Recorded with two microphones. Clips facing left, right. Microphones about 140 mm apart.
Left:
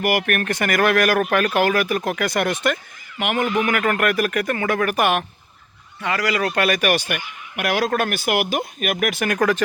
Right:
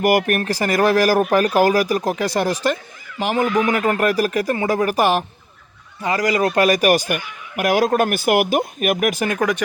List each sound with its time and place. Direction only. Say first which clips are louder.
0.0 s speech: right 4 dB; 45° right (ahead or behind)
0.3 s speech: right 2 dB; 30° right (ahead or behind)
9.4 s speech: left 3 dB; 15° right (ahead or behind)